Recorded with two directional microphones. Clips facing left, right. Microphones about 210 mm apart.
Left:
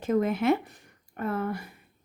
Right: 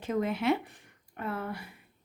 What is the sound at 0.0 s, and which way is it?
A woman's voice, 45° left (ahead or behind).